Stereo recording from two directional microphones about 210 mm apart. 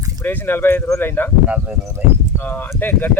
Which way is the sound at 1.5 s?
5° right (ahead or behind).